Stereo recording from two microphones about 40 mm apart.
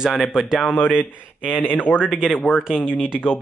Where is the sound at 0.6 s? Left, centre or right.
Left.